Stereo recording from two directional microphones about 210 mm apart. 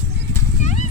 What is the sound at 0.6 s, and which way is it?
Horse, 35° left (ahead or behind).